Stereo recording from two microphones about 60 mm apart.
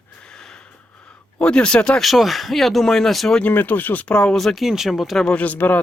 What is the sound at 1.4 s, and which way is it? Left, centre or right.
Speech, centre.